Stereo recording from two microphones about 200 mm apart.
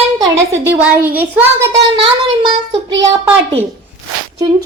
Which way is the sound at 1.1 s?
10° right (ahead or behind).